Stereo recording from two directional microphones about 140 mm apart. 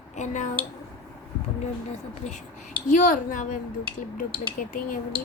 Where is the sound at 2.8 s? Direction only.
70° left (ahead or behind).